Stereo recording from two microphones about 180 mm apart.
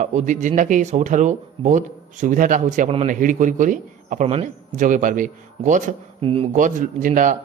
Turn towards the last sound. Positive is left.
turn(degrees=-45)  # may be behind; listen again after turning